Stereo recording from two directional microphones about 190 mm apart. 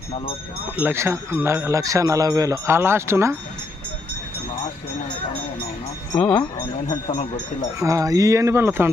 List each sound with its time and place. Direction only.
0.8 s speech: 15° right (ahead or behind)
6.1 s speech: 5° left (ahead or behind)
7.8 s speech: 15° right (ahead or behind)